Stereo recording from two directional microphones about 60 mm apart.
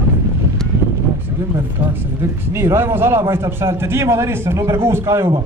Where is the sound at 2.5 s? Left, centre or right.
Right.